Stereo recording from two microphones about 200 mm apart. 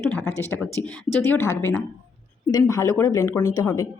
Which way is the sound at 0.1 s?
10° left (ahead or behind).